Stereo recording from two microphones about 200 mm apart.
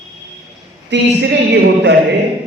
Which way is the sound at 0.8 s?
60° right (ahead or behind).